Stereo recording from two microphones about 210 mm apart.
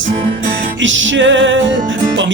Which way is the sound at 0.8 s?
65° right (ahead or behind).